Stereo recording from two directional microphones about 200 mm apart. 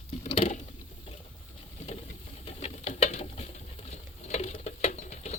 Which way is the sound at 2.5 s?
35° left (ahead or behind).